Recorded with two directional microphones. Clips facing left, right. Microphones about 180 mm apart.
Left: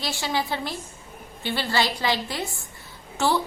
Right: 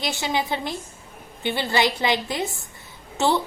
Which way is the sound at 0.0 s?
20° right (ahead or behind).